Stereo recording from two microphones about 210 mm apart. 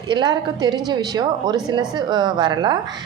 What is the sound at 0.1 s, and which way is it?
A woman's voice, 20° right (ahead or behind).